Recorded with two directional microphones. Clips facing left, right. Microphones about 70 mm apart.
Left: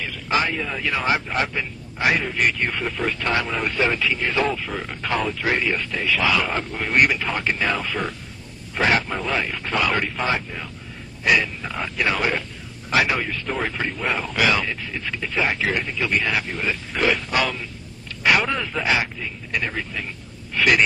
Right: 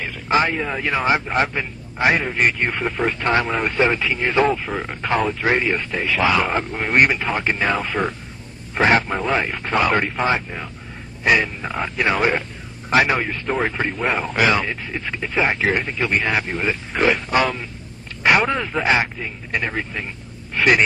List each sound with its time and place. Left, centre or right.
0.0 s a man's voice: right